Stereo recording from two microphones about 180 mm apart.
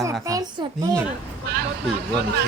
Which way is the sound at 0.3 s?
20° right (ahead or behind).